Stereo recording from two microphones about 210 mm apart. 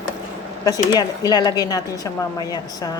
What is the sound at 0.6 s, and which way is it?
A woman's voice, 20° left (ahead or behind).